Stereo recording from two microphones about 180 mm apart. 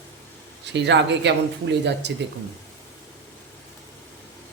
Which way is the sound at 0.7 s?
75° right (ahead or behind).